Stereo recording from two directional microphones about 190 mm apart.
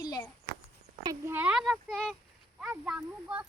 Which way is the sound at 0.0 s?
20° left (ahead or behind).